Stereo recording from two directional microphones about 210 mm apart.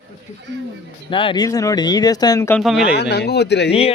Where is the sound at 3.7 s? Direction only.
30° left (ahead or behind).